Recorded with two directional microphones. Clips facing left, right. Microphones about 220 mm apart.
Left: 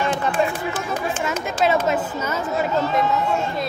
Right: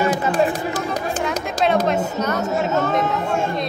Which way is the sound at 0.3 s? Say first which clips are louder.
Right 3 dB; 40° right (ahead or behind).